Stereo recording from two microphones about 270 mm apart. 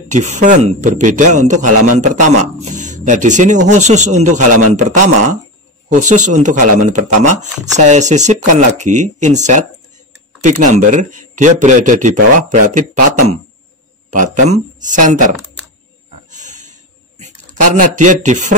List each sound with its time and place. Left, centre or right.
0.1 s speech: right
14.1 s speech: right
16.3 s a sound: right
17.2 s speech: right